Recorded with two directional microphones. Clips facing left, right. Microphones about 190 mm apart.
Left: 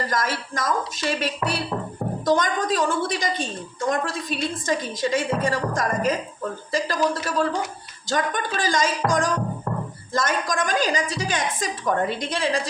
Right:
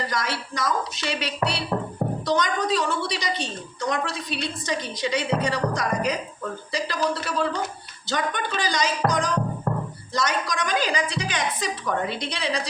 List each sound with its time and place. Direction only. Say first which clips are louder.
0.1 s a woman's voice: left 2 dB; 50° left (ahead or behind)